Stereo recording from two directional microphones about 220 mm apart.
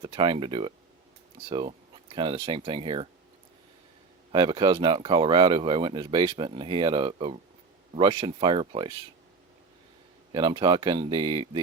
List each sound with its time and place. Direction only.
0.0 s speech: 20° right (ahead or behind)
4.3 s speech: 20° right (ahead or behind)
10.3 s speech: 20° right (ahead or behind)